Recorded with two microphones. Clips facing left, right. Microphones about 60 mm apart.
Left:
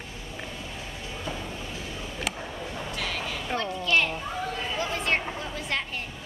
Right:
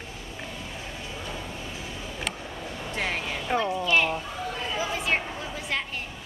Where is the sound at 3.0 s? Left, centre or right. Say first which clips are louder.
Right 4 dB; right.